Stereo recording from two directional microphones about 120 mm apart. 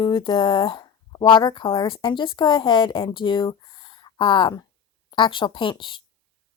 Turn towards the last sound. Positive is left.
turn(degrees=45)  # may be behind; listen again after turning